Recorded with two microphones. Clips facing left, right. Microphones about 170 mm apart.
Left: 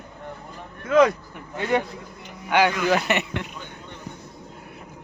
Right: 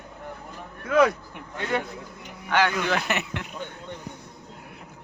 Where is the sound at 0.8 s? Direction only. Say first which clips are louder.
Left 3 dB; 10° right (ahead or behind).